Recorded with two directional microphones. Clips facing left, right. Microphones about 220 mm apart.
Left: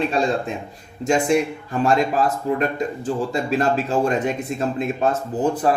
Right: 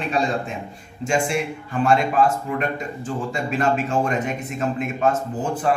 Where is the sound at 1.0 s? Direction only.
40° left (ahead or behind).